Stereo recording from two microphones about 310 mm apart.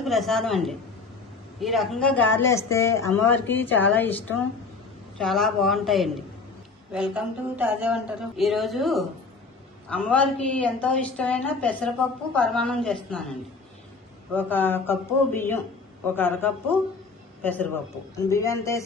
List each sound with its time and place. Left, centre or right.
0.0 s speech: centre
14.3 s a man's voice: centre